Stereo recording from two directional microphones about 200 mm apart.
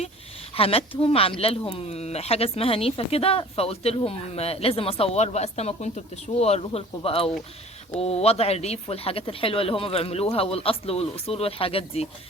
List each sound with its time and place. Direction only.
0.5 s speech: 30° left (ahead or behind)